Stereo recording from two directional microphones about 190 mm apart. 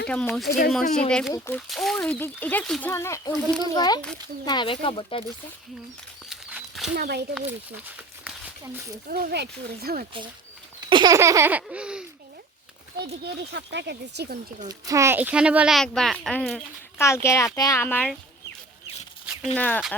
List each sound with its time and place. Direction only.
0.1 s a child's voice: 5° left (ahead or behind)
1.6 s a child's voice: centre (ahead or behind); by 5.2 s 30° left (ahead or behind)
6.2 s a sound: centre (ahead or behind)
6.9 s speech: 55° right (ahead or behind)
7.9 s a sound: 10° right (ahead or behind)
9.0 s speech: 50° right (ahead or behind)
10.8 s baby laughter: 25° right (ahead or behind); by 12.0 s 5° right (ahead or behind)
13.2 s speech: 65° right (ahead or behind)
14.7 s speech: 15° right (ahead or behind); by 16.6 s 5° left (ahead or behind)
17.0 s a child's voice: 15° left (ahead or behind)
19.2 s a sound: 5° right (ahead or behind)
19.5 s a child's voice: 10° left (ahead or behind)